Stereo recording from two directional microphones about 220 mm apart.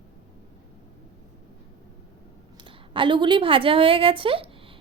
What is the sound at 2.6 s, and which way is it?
Speech, 20° right (ahead or behind).